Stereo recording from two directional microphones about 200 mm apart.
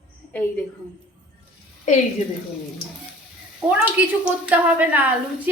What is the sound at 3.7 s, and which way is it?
A woman's voice, 5° right (ahead or behind).